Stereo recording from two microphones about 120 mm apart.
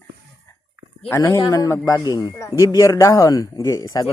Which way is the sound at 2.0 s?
35° left (ahead or behind).